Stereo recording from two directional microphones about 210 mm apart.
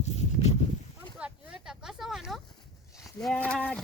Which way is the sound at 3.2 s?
5° left (ahead or behind).